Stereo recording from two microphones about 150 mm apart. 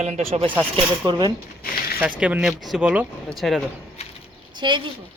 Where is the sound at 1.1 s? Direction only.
30° right (ahead or behind).